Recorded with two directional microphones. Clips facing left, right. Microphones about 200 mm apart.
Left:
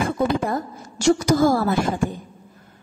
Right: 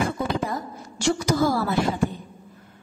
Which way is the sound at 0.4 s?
50° left (ahead or behind).